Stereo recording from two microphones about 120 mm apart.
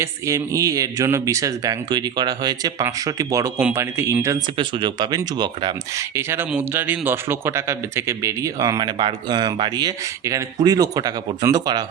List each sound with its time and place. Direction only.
0.0 s a man's voice: 25° right (ahead or behind)
4.5 s speech: 40° right (ahead or behind)
6.0 s a man's voice: 20° right (ahead or behind)